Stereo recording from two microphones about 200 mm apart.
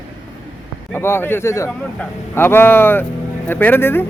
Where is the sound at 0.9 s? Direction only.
10° left (ahead or behind).